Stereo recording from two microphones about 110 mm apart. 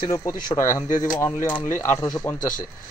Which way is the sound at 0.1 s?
30° left (ahead or behind).